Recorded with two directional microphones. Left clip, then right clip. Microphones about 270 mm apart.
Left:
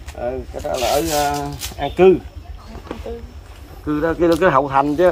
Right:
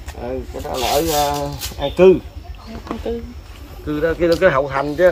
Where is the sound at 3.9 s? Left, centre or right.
Centre.